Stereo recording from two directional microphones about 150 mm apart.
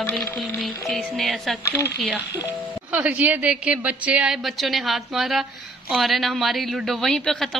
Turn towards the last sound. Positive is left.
turn(degrees=5)  # may be behind; listen again after turning